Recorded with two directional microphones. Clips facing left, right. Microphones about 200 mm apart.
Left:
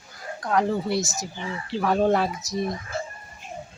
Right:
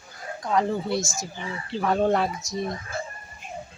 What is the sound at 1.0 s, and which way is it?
Speech, 20° left (ahead or behind).